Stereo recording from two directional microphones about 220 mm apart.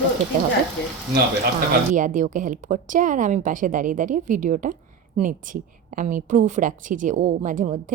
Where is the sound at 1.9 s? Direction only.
35° right (ahead or behind).